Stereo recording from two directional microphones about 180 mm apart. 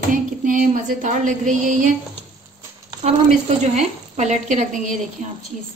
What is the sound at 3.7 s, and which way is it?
Speech, 40° right (ahead or behind).